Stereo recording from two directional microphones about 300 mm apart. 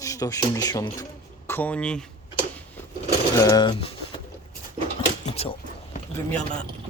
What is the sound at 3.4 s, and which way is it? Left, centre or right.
Speech, centre.